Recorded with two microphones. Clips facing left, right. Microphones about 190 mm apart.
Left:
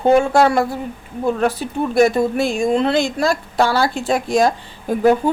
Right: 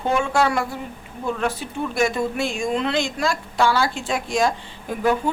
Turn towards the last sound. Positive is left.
turn(degrees=35)  # may be behind; listen again after turning